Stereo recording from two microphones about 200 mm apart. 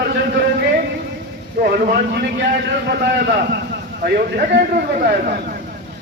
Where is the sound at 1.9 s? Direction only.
55° right (ahead or behind).